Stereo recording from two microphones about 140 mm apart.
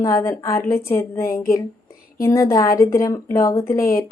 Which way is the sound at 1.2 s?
90° left.